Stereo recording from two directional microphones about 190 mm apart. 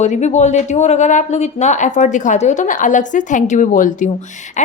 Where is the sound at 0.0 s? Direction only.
35° left (ahead or behind).